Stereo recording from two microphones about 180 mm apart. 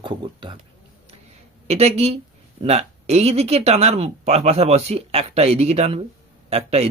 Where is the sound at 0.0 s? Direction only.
25° right (ahead or behind).